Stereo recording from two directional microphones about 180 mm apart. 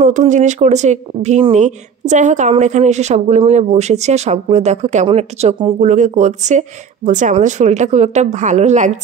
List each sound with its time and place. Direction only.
0.0 s speech: 40° right (ahead or behind)